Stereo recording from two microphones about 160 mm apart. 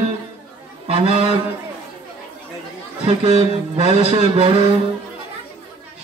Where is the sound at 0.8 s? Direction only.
35° right (ahead or behind).